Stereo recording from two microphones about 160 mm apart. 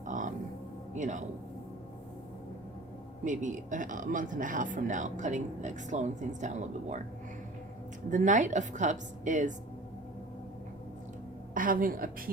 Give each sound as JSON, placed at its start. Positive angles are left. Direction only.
{"t": 0.0, "sound": "music", "side_deg": -55}
{"t": 0.9, "sound": "speech", "side_deg": -50}
{"t": 3.2, "sound": "speech", "side_deg": -50}
{"t": 8.1, "sound": "speech", "side_deg": -50}
{"t": 11.5, "sound": "a woman's voice", "side_deg": -60}